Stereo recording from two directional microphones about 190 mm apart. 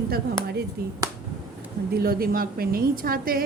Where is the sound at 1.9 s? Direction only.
50° right (ahead or behind).